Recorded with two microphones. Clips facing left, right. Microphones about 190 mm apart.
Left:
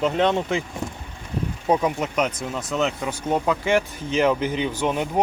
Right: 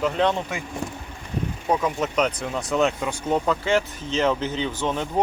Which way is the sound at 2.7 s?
Centre (ahead or behind).